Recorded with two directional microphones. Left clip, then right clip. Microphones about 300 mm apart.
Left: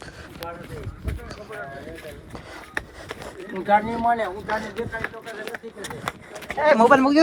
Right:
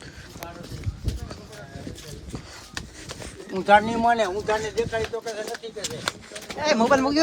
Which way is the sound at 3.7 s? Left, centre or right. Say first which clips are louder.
Right 2 dB; right.